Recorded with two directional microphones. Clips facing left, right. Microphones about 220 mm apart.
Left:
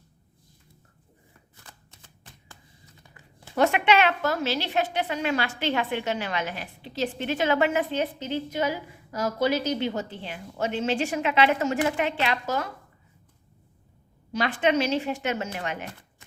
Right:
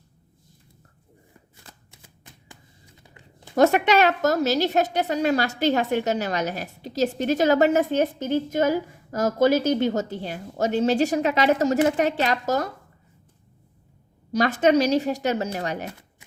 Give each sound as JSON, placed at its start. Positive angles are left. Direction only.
{"t": 2.5, "sound": "a sound", "side_deg": -20}
{"t": 3.5, "sound": "a woman's voice", "side_deg": -40}
{"t": 14.3, "sound": "a woman's voice", "side_deg": -40}